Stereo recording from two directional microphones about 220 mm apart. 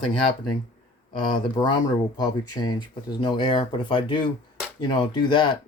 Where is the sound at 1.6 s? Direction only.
20° left (ahead or behind).